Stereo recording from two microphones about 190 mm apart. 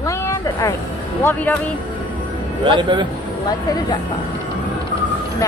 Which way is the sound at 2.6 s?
25° right (ahead or behind).